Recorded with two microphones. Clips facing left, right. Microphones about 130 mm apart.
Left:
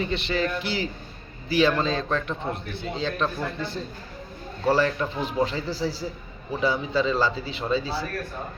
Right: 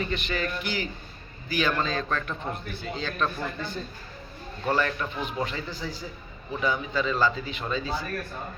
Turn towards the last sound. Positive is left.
turn(degrees=30)  # may be behind; listen again after turning